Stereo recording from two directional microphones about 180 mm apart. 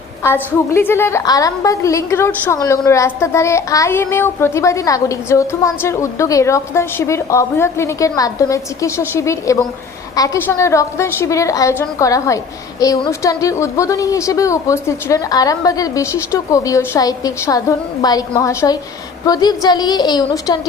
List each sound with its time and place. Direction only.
0.2 s a woman's voice: 15° left (ahead or behind)